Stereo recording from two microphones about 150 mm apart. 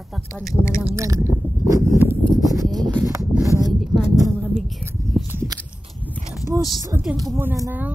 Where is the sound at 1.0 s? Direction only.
20° right (ahead or behind).